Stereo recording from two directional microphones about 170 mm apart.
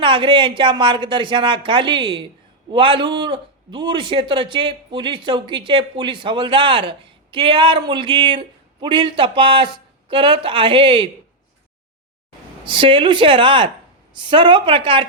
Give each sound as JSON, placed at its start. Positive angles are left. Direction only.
{"t": 0.0, "sound": "a man's voice", "side_deg": -30}
{"t": 12.6, "sound": "a man's voice", "side_deg": -30}